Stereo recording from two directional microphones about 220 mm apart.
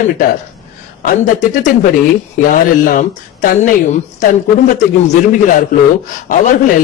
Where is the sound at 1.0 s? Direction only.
35° left (ahead or behind).